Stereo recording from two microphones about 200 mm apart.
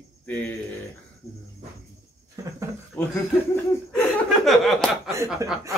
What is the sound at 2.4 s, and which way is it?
Speech, 15° right (ahead or behind).